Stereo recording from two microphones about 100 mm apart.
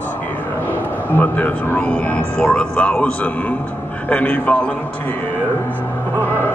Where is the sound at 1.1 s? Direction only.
15° left (ahead or behind).